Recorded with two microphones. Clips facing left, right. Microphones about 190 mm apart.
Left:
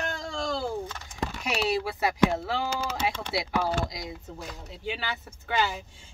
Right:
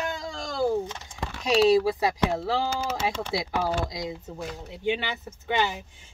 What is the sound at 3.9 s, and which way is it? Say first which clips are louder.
Speech: right 5 dB; 20° right (ahead or behind).